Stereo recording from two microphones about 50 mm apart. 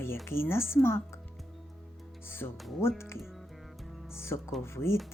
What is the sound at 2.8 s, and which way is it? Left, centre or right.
Speech, left.